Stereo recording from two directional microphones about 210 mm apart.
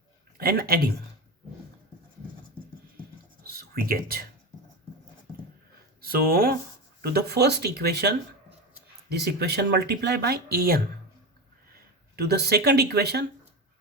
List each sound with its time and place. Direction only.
0.3 s speech: 45° right (ahead or behind)
3.4 s a sound: 45° right (ahead or behind)
6.0 s speech: 45° right (ahead or behind)
12.1 s speech: 50° right (ahead or behind)